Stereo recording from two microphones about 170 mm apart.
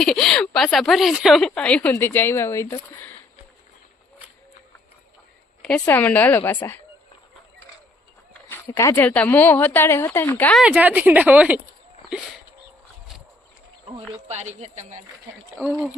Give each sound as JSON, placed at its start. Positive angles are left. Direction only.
{"t": 0.0, "sound": "a woman's voice", "side_deg": 0}
{"t": 5.6, "sound": "speech", "side_deg": 10}
{"t": 8.3, "sound": "speech", "side_deg": 10}
{"t": 10.6, "sound": "a woman's voice", "side_deg": -10}
{"t": 14.3, "sound": "speech", "side_deg": -40}